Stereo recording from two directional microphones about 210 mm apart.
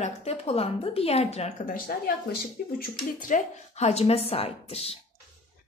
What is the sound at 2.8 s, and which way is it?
Speech, 40° left (ahead or behind).